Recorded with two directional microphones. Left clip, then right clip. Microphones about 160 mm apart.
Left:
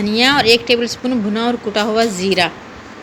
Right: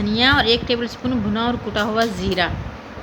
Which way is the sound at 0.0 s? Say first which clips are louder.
Left 3 dB; 15° left (ahead or behind).